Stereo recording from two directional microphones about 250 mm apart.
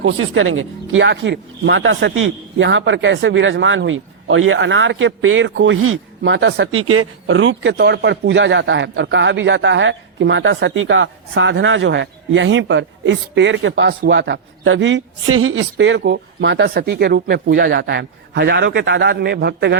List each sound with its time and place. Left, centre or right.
0.0 s speech: right